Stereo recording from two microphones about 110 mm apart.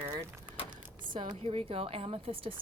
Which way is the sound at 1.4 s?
60° right (ahead or behind).